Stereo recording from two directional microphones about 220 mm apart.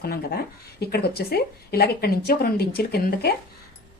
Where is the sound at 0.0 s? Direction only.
45° left (ahead or behind).